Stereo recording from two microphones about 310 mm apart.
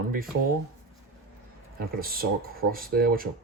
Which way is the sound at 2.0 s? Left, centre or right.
Right.